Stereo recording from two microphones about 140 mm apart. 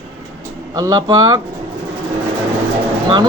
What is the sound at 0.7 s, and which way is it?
Speech, 25° right (ahead or behind).